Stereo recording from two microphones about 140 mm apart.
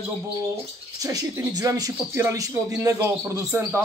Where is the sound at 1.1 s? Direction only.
25° right (ahead or behind).